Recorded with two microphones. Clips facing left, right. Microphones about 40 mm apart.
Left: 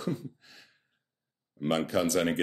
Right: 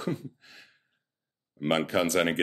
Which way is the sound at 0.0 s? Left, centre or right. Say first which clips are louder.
Right 1 dB; right.